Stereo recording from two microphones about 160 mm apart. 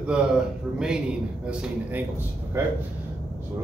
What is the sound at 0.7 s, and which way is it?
A man's voice, 5° right (ahead or behind).